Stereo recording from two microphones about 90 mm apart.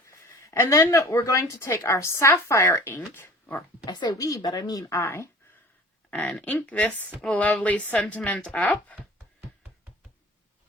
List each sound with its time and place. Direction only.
0.5 s a woman's voice: 35° left (ahead or behind)
3.8 s a woman's voice: 50° left (ahead or behind)
4.2 s a woman's voice: 40° left (ahead or behind)
6.1 s speech: 15° left (ahead or behind)